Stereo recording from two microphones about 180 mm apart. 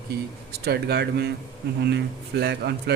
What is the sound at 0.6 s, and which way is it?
Speech, 65° right (ahead or behind).